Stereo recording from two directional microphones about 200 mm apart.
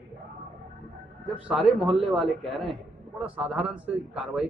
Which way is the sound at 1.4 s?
Centre (ahead or behind).